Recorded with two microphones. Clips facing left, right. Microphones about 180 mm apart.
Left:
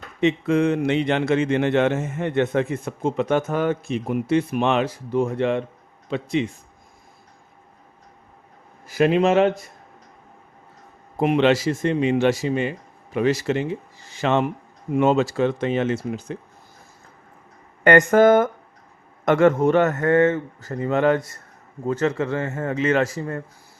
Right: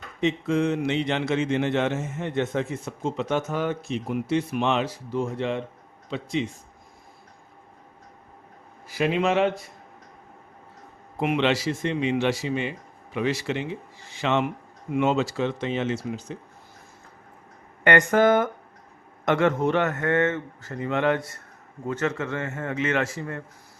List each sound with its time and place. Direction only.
0.2 s speech: 65° left (ahead or behind)
8.9 s speech: 45° left (ahead or behind)
11.2 s speech: 40° left (ahead or behind)
17.8 s speech: 45° left (ahead or behind)